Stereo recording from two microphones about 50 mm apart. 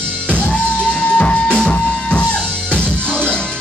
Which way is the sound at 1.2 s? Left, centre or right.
Left.